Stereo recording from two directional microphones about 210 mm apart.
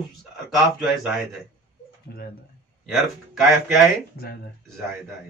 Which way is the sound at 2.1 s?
45° left (ahead or behind).